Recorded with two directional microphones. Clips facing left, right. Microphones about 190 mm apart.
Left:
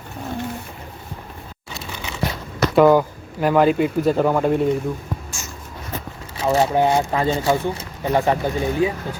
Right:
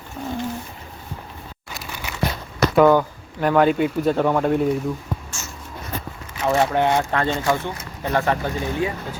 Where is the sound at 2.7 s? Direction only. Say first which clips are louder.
Left 2 dB; 5° left (ahead or behind).